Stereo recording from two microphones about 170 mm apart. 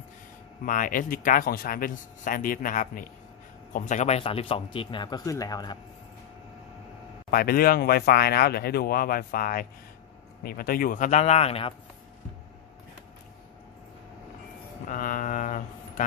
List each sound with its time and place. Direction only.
0.7 s speech: 50° left (ahead or behind); by 5.8 s 25° left (ahead or behind)
7.2 s speech: 60° left (ahead or behind); by 11.7 s 35° left (ahead or behind)
14.9 s a sound: 50° left (ahead or behind)